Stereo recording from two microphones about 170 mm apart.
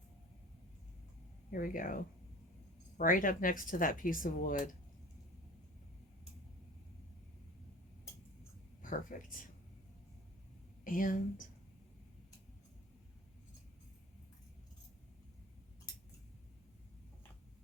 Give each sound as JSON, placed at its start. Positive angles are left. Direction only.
{"t": 1.5, "sound": "speech", "side_deg": 55}
{"t": 3.0, "sound": "speech", "side_deg": 55}
{"t": 8.8, "sound": "speech", "side_deg": 55}
{"t": 10.8, "sound": "speech", "side_deg": 55}